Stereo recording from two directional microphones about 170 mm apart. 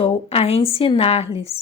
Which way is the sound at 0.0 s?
35° left (ahead or behind).